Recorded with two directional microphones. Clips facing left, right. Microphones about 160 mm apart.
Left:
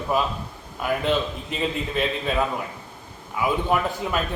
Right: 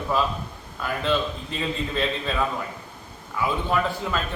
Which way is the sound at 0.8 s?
15° left (ahead or behind).